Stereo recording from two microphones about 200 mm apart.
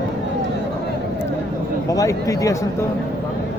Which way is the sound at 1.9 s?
15° left (ahead or behind).